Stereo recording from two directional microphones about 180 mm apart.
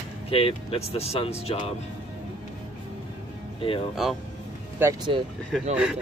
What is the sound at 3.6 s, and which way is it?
Speech, 30° left (ahead or behind).